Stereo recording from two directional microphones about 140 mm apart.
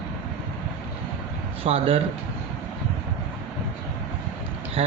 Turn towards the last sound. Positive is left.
turn(degrees=-40)  # may be behind; listen again after turning